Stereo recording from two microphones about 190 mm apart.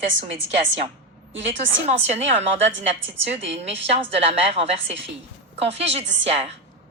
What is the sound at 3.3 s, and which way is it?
A woman's voice, 35° right (ahead or behind).